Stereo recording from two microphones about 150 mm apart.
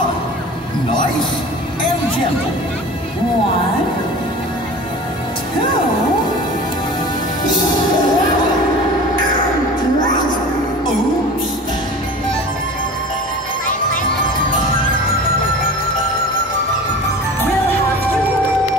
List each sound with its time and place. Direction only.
7.4 s music: 30° left (ahead or behind)